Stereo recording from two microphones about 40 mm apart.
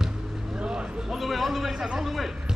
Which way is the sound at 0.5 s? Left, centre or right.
Right.